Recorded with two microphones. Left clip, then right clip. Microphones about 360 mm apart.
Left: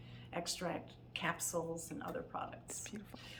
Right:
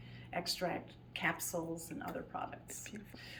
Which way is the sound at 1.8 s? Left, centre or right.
Centre.